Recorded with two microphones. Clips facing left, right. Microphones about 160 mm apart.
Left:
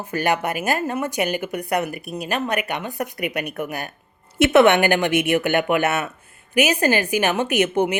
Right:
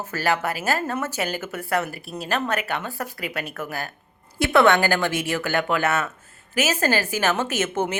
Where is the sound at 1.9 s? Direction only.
30° right (ahead or behind).